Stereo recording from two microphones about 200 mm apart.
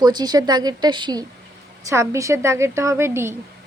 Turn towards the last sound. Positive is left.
turn(degrees=-10)  # may be behind; listen again after turning